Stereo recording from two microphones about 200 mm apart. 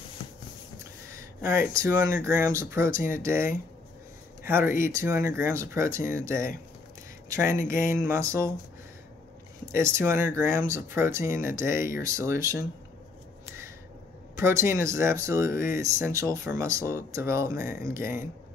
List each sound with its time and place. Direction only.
1.1 s a sound: 10° right (ahead or behind)
1.8 s speech: 15° right (ahead or behind)
4.5 s speech: 10° right (ahead or behind)
9.7 s speech: 15° right (ahead or behind)
14.3 s speech: 15° right (ahead or behind)